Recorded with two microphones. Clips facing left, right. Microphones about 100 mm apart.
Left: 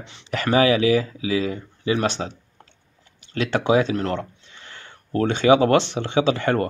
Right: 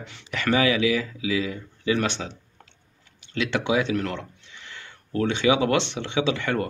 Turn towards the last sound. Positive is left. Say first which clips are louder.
# left 5 dB
turn(degrees=40)  # may be behind; listen again after turning